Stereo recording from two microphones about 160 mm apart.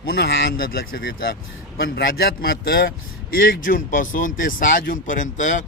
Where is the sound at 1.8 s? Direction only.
75° left (ahead or behind).